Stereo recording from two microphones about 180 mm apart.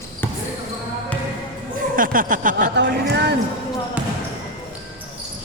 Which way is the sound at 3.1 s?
65° right (ahead or behind).